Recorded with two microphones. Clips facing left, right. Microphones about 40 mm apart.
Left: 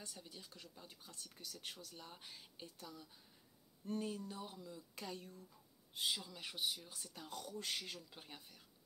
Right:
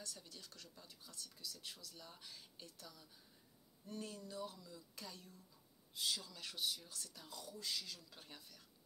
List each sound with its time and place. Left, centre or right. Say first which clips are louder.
0.0 s speech: left 1 dB; left
0.7 s speech: left 1 dB; left
5.9 s speech: left 2 dB; left
7.2 s speech: left 3 dB; left
8.1 s speech: left 2 dB; left